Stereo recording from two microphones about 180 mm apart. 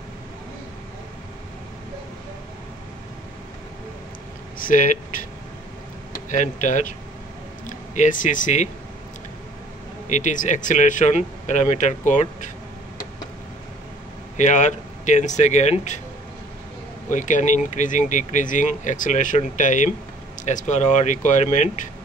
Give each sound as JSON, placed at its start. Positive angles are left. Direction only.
{"t": 4.6, "sound": "speech", "side_deg": 50}
{"t": 6.3, "sound": "speech", "side_deg": 45}
{"t": 7.9, "sound": "speech", "side_deg": 45}
{"t": 10.0, "sound": "speech", "side_deg": 45}
{"t": 14.3, "sound": "speech", "side_deg": 40}
{"t": 17.1, "sound": "speech", "side_deg": 45}